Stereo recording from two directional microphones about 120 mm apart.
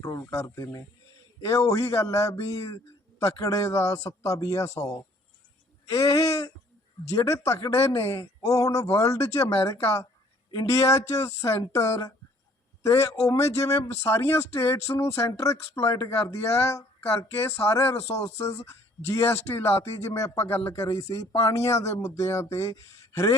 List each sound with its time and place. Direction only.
0.0 s speech: 25° left (ahead or behind)